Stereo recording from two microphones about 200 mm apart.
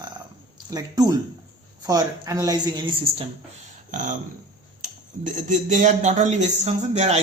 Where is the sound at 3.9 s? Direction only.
40° right (ahead or behind).